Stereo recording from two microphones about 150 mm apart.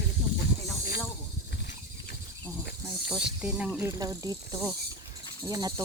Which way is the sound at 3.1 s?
5° right (ahead or behind).